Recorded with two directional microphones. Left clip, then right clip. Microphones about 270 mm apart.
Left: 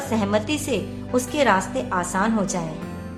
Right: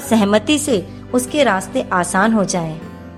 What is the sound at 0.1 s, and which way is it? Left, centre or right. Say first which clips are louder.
A woman's voice: right 9 dB; right.